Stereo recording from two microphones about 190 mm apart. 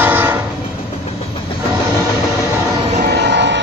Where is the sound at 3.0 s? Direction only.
65° right (ahead or behind).